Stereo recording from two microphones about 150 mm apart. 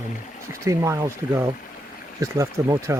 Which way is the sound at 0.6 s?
20° right (ahead or behind).